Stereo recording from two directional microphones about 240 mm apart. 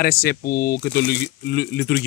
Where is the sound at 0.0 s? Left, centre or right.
Left.